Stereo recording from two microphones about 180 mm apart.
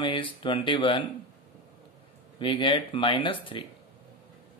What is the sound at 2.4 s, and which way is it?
Speech, 30° left (ahead or behind).